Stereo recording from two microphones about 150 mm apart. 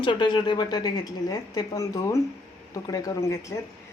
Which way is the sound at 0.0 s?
30° left (ahead or behind).